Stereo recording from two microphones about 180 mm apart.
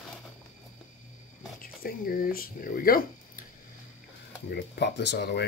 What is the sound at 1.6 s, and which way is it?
Speech, 55° left (ahead or behind).